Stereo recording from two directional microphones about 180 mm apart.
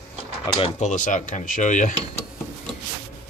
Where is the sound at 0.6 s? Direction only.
35° left (ahead or behind).